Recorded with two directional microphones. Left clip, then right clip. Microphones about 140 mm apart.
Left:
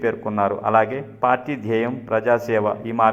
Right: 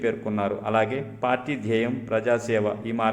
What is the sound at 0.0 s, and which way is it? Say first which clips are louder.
A man's voice: left 5 dB; centre (ahead or behind).